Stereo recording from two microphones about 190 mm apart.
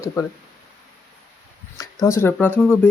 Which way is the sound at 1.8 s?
15° left (ahead or behind).